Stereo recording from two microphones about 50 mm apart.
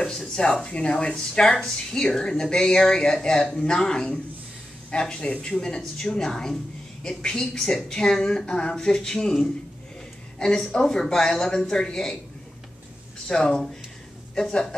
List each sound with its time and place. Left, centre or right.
0.4 s speech: centre
13.3 s speech: centre